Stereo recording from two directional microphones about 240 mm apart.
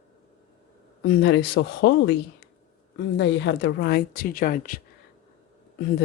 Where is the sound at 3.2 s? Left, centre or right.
Left.